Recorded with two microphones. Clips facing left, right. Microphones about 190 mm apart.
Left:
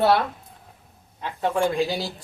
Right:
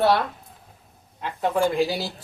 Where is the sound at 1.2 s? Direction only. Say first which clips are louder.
Right 1 dB; centre (ahead or behind).